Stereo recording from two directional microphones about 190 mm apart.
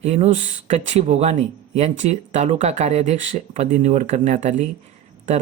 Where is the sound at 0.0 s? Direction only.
35° right (ahead or behind).